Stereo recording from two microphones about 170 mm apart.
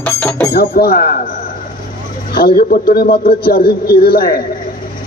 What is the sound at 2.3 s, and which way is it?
Speech, 65° left (ahead or behind).